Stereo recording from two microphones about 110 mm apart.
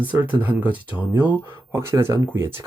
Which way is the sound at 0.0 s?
15° right (ahead or behind).